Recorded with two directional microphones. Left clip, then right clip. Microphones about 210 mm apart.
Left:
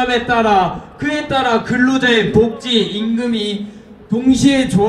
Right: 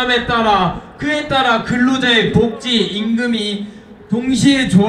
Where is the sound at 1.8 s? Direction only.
55° left (ahead or behind).